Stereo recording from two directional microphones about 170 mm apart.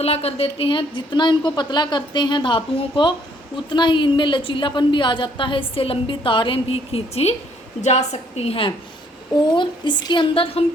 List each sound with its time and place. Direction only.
0.0 s a woman's voice: 35° left (ahead or behind)